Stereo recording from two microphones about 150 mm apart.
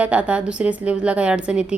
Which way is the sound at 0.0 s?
10° right (ahead or behind).